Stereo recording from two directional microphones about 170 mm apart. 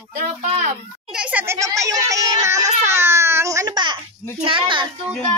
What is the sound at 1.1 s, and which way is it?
Speech, 5° right (ahead or behind).